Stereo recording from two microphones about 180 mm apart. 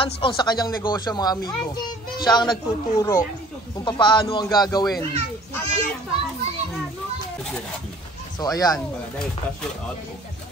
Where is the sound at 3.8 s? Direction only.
25° left (ahead or behind).